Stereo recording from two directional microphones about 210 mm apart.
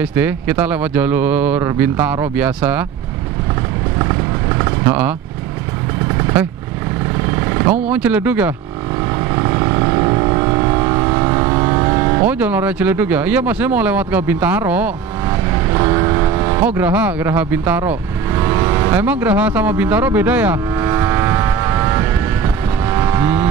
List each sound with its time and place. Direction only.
0.0 s speech: 10° right (ahead or behind)
4.0 s vehicle: 20° right (ahead or behind)
7.9 s speech: 10° right (ahead or behind)
9.3 s vehicle: 15° right (ahead or behind)
15.7 s vehicle: 20° right (ahead or behind)